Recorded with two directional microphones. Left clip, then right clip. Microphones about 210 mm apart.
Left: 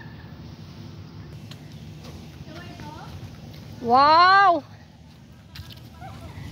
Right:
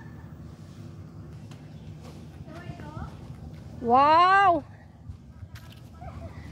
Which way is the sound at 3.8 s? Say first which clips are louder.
Left 3 dB; 5° right (ahead or behind).